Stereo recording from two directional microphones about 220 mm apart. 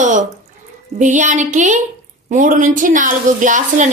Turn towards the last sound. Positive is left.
turn(degrees=-35)  # may be behind; listen again after turning